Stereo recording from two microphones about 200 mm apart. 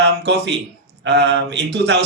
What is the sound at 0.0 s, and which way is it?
Speech, 60° right (ahead or behind).